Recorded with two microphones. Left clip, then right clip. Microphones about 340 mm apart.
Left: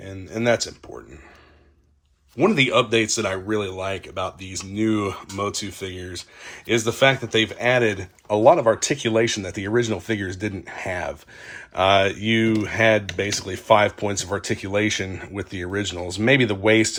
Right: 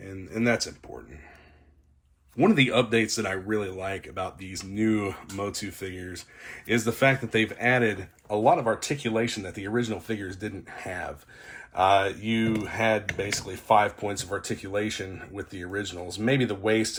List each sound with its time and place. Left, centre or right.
0.0 s speech: centre
2.4 s speech: centre